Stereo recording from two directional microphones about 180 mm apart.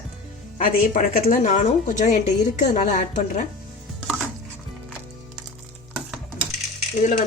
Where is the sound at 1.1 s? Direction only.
50° left (ahead or behind).